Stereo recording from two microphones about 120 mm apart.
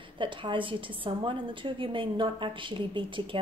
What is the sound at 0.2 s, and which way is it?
A woman's voice, 45° right (ahead or behind).